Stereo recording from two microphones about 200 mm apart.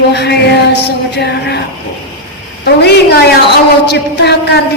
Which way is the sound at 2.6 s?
55° left (ahead or behind).